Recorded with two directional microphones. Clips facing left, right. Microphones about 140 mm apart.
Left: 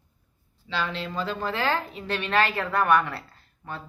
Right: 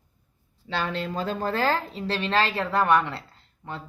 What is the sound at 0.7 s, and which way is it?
A woman's voice, 50° right (ahead or behind).